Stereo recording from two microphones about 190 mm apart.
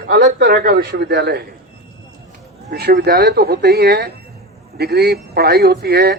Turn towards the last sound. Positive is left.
turn(degrees=-55)  # may be behind; listen again after turning